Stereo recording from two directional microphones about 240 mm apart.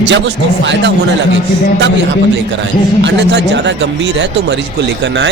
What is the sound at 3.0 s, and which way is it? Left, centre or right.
Speech, right.